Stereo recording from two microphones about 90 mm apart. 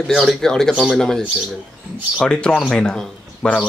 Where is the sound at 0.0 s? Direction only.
Centre (ahead or behind).